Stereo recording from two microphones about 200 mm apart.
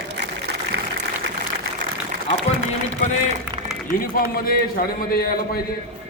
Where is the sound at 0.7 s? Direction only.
60° right (ahead or behind).